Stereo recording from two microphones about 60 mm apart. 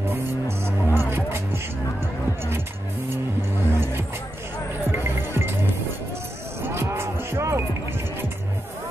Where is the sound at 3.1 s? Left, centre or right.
Right.